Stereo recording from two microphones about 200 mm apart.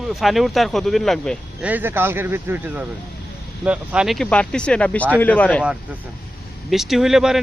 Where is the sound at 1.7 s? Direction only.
10° right (ahead or behind); by 5.6 s 5° left (ahead or behind).